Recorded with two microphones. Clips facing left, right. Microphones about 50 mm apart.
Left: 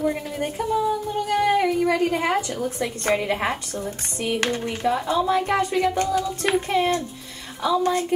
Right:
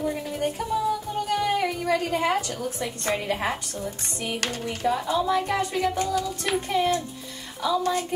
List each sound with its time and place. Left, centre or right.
0.0 s speech: left
1.3 s music: left
1.8 s a woman's voice: left
5.4 s speech: left
5.7 s music: centre
6.0 s speech: left